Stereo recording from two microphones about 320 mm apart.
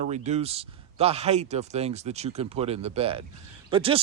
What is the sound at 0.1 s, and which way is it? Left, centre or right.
Speech, centre.